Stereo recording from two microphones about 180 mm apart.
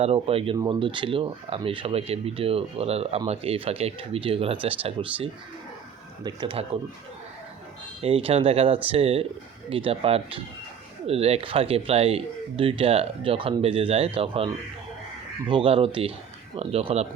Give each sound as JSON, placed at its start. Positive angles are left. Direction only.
{"t": 0.0, "sound": "speech", "side_deg": -35}
{"t": 8.0, "sound": "speech", "side_deg": -30}